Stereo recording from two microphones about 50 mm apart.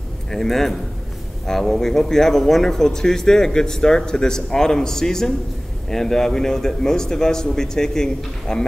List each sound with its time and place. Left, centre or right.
0.3 s speech: centre